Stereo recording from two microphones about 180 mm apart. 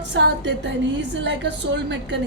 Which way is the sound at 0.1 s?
75° right (ahead or behind).